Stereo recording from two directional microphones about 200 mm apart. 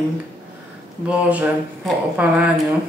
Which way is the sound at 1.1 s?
5° right (ahead or behind).